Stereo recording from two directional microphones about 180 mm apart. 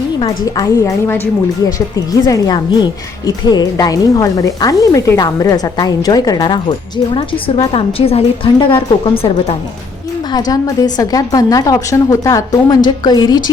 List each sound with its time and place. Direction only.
0.2 s a woman's voice: 20° left (ahead or behind)